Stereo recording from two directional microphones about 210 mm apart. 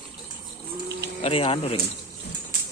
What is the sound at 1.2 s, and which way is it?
Speech, 25° left (ahead or behind).